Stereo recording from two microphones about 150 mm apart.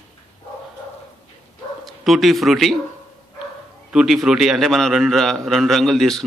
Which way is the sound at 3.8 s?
5° right (ahead or behind).